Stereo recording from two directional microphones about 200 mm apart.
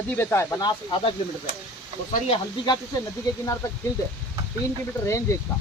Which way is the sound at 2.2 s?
25° left (ahead or behind).